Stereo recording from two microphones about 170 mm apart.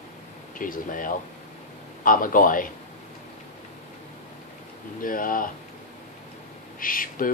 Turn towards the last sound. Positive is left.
turn(degrees=55)  # may be behind; listen again after turning